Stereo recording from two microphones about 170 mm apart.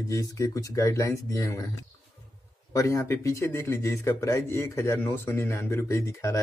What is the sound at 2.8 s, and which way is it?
Speech, 15° left (ahead or behind).